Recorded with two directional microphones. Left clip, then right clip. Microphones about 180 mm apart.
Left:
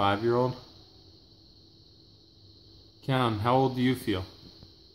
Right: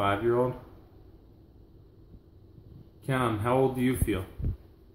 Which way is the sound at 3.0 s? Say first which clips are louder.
Left 1 dB; 45° left (ahead or behind).